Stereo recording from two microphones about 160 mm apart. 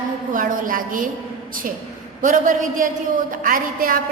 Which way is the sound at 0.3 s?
55° right (ahead or behind).